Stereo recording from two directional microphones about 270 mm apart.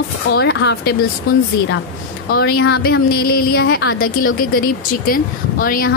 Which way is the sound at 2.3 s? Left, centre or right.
Left.